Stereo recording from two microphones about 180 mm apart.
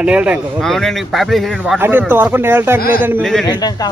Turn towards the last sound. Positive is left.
turn(degrees=20)  # may be behind; listen again after turning